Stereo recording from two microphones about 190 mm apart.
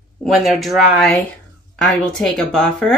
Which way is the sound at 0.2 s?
Centre (ahead or behind).